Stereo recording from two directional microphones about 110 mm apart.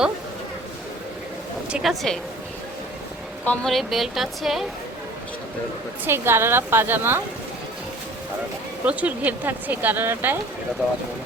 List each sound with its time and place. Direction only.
1.7 s speech: centre (ahead or behind)
3.4 s a woman's voice: 15° left (ahead or behind)
3.7 s speech: centre (ahead or behind)
6.1 s a woman's voice: 20° right (ahead or behind)
8.8 s speech: 15° right (ahead or behind)